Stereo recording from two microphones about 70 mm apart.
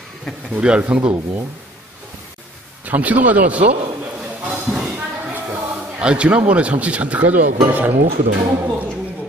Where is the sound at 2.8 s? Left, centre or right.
Right.